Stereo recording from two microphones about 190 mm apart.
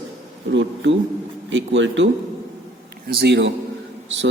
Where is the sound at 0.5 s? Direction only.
75° right (ahead or behind).